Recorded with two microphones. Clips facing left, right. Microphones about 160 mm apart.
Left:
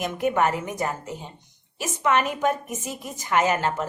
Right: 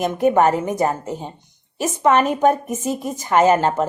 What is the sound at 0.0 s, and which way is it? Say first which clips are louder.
A woman's voice: right 7 dB; 35° right (ahead or behind).